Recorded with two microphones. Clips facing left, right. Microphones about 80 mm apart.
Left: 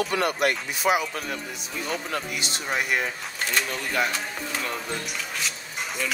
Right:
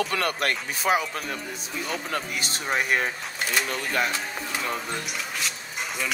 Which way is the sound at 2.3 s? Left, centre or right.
Right.